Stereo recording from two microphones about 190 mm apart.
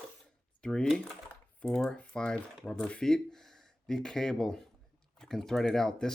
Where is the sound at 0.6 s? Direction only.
5° left (ahead or behind).